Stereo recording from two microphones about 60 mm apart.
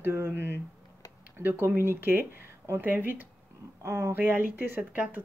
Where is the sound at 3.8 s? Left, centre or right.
Right.